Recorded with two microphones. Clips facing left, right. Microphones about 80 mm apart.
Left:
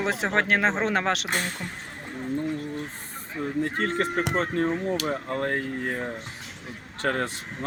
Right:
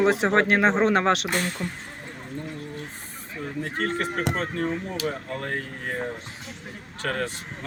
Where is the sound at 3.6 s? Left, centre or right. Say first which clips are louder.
Left 1 dB; left.